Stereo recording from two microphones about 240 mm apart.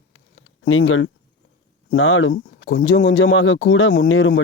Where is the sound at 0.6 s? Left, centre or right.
Left.